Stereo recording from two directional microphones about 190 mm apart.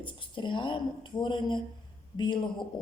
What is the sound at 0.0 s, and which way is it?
A woman's voice, 25° left (ahead or behind).